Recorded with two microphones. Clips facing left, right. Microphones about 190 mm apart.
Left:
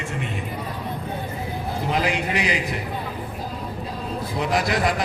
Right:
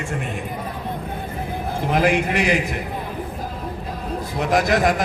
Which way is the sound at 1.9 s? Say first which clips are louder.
Right 5 dB; 50° right (ahead or behind).